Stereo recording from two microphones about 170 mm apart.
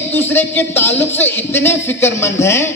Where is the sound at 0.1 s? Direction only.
10° left (ahead or behind).